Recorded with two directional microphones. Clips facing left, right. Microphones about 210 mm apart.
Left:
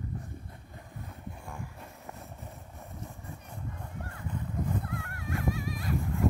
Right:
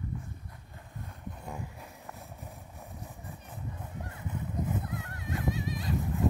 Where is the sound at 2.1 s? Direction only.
Centre (ahead or behind).